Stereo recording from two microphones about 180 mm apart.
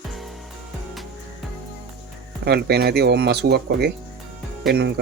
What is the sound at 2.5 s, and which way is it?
Speech, 60° right (ahead or behind).